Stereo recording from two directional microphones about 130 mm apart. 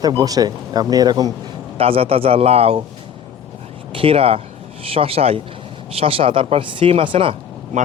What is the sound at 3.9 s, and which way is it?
Speech, 45° right (ahead or behind).